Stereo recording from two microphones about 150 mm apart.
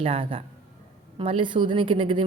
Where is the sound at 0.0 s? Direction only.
35° right (ahead or behind).